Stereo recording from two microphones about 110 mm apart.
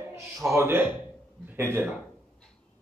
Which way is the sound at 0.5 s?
20° right (ahead or behind).